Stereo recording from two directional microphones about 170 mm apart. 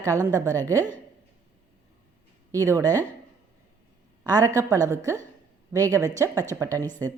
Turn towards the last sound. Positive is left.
turn(degrees=-20)  # may be behind; listen again after turning